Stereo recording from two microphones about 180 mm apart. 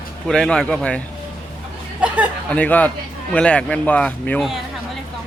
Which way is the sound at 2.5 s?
10° left (ahead or behind).